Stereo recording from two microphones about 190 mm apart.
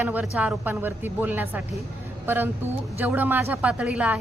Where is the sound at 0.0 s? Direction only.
10° right (ahead or behind).